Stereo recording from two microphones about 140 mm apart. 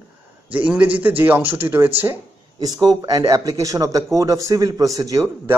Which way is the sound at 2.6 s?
30° right (ahead or behind).